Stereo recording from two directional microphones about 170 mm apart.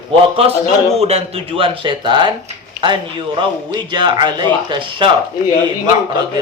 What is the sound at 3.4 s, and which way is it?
Speech, 25° right (ahead or behind).